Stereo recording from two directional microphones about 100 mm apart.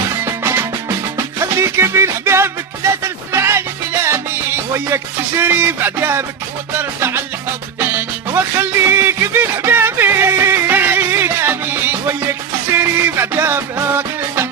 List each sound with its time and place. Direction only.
1.5 s music: 25° right (ahead or behind)